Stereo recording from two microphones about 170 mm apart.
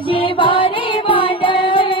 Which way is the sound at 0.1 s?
30° left (ahead or behind).